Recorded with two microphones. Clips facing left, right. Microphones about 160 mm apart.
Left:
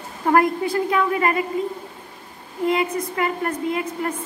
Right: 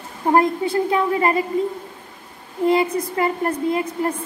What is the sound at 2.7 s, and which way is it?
A woman's voice, 35° right (ahead or behind).